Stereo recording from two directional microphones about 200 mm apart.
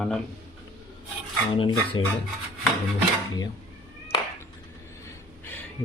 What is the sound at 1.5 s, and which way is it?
Speech, 25° left (ahead or behind).